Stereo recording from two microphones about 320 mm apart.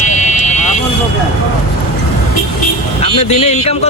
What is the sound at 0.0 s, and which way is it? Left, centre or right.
Vehicle, left.